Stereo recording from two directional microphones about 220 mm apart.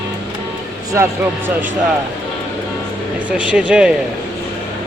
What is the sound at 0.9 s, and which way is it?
Speech, 10° right (ahead or behind).